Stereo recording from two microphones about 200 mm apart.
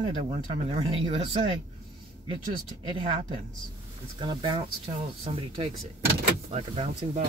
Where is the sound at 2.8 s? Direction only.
25° right (ahead or behind).